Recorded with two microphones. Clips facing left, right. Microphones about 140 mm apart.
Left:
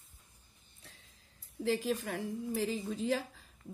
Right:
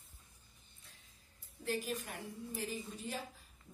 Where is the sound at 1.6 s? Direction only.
90° left.